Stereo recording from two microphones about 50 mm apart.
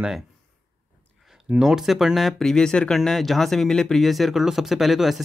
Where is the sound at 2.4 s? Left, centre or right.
Centre.